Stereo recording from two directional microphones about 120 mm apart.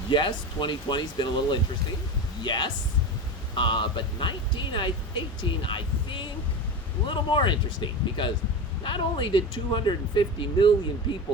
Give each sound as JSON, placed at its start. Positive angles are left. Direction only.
{"t": 0.1, "sound": "speech", "side_deg": 40}